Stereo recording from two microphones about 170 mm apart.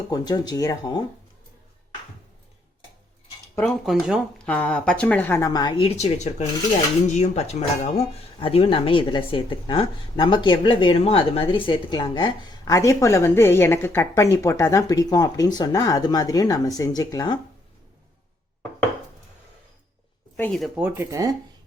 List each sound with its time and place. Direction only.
0.1 s speech: 25° left (ahead or behind)
3.6 s speech: centre (ahead or behind); by 17.3 s 20° left (ahead or behind)
20.3 s speech: 5° left (ahead or behind)
20.7 s speech: 10° right (ahead or behind)